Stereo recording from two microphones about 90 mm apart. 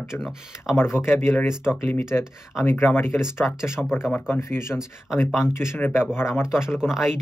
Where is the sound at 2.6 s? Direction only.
25° left (ahead or behind).